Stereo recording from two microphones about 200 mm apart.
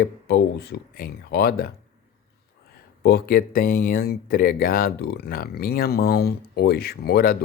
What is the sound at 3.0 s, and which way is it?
Speech, 50° left (ahead or behind).